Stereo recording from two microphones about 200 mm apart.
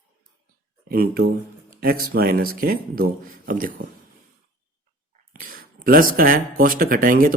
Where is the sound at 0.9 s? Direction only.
50° right (ahead or behind).